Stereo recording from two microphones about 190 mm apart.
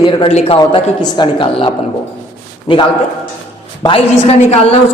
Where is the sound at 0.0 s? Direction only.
25° left (ahead or behind).